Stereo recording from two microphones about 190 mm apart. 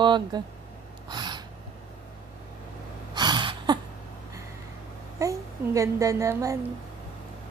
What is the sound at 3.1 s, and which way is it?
Gasp, 20° right (ahead or behind).